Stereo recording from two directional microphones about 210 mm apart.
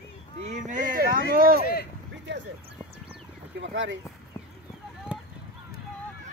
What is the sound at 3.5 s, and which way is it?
Speech, 60° right (ahead or behind).